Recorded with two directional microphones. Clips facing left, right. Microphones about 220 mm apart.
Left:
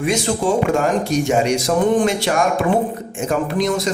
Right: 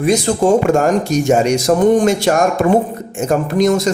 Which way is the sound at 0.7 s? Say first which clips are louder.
Right 4 dB; 45° right (ahead or behind).